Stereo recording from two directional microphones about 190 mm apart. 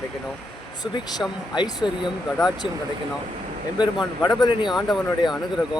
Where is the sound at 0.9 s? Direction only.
20° left (ahead or behind).